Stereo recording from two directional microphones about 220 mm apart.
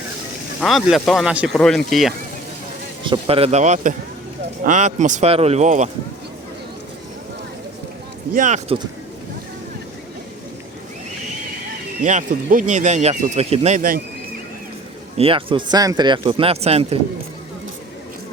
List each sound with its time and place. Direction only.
0.6 s speech: centre (ahead or behind)
3.0 s speech: 25° right (ahead or behind)
8.3 s speech: 35° right (ahead or behind)
12.0 s speech: 35° right (ahead or behind)
15.2 s speech: 25° right (ahead or behind)